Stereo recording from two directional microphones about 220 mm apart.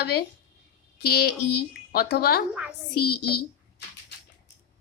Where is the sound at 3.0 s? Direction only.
90° left.